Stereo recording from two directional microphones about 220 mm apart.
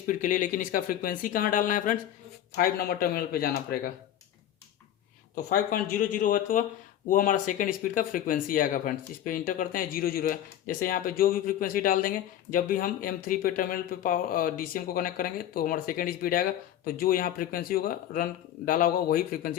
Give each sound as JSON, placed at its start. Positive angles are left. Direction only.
{"t": 0.1, "sound": "a man's voice", "side_deg": 35}
{"t": 5.3, "sound": "speech", "side_deg": 40}